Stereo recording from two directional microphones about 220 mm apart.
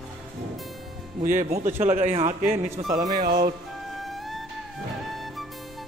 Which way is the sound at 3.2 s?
45° right (ahead or behind).